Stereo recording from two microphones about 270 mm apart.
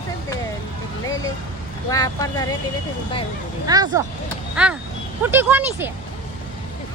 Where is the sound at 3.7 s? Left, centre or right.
Centre.